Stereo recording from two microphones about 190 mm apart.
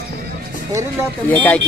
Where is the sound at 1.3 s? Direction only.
10° left (ahead or behind).